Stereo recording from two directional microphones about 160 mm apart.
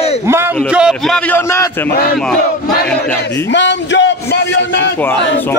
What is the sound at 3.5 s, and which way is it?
Speech, 90° left.